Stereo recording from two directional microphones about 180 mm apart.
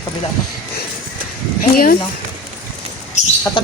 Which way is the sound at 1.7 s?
50° left (ahead or behind).